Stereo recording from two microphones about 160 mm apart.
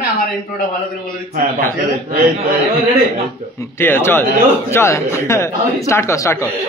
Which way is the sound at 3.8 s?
15° left (ahead or behind).